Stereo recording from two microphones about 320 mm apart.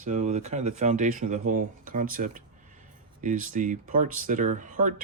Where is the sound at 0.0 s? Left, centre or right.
Right.